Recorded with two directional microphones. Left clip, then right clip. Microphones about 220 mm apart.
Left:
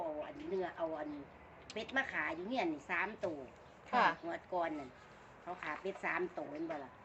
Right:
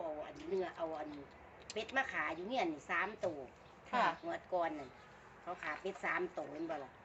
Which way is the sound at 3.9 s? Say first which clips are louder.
Left 3 dB; 45° left (ahead or behind).